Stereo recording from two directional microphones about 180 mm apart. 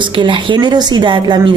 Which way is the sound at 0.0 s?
25° right (ahead or behind).